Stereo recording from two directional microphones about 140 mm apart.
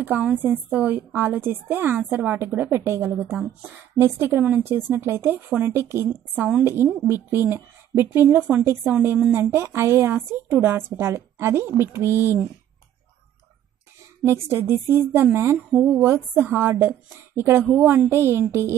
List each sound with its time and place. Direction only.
0.0 s speech: 10° right (ahead or behind)
14.2 s speech: 15° right (ahead or behind)